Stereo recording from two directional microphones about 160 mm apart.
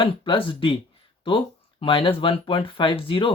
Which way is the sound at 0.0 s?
30° left (ahead or behind).